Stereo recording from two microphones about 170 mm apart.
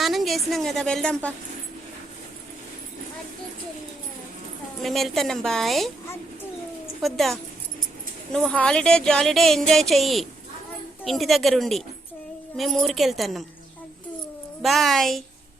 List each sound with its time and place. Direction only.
0.0 s a woman's voice: centre (ahead or behind)
4.8 s a woman's voice: centre (ahead or behind)
7.0 s a woman's voice: centre (ahead or behind)
14.6 s a woman's voice: centre (ahead or behind)